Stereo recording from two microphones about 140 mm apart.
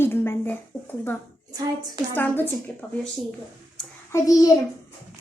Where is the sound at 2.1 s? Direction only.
15° left (ahead or behind).